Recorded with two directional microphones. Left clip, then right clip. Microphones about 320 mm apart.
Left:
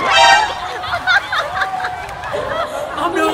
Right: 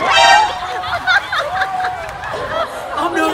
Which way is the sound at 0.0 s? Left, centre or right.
Centre.